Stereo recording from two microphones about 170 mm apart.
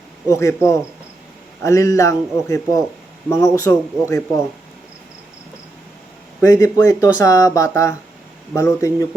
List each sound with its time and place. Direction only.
0.3 s speech: 15° left (ahead or behind)
6.4 s speech: 20° left (ahead or behind)